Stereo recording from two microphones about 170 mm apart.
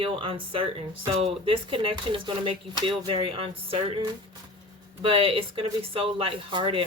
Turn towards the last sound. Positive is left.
turn(degrees=-30)  # may be behind; listen again after turning